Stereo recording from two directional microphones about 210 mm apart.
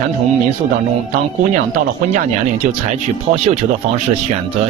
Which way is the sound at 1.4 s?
35° right (ahead or behind).